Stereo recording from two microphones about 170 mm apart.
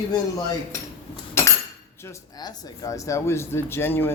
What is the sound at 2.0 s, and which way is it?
Speech, 20° left (ahead or behind).